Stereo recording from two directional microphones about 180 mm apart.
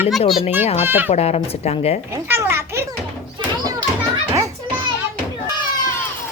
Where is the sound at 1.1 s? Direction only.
35° left (ahead or behind).